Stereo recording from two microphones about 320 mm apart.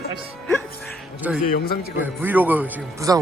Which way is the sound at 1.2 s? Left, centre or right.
Centre.